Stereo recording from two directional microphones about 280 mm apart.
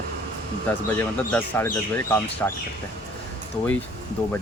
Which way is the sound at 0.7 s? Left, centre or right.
Centre.